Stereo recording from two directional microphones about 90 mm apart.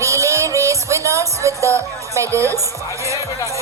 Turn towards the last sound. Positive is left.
turn(degrees=-35)  # may be behind; listen again after turning